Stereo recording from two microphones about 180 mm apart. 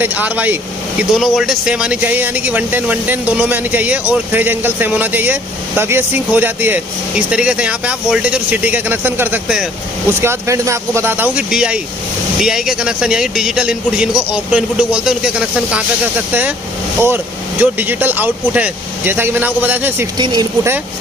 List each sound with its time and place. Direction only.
0.0 s a man's voice: 10° right (ahead or behind)
20.2 s speech: 25° right (ahead or behind)